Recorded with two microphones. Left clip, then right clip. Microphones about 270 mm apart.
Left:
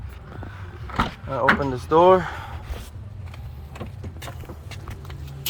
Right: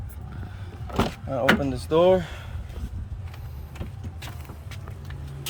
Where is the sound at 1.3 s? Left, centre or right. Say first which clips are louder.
Left 2 dB; centre.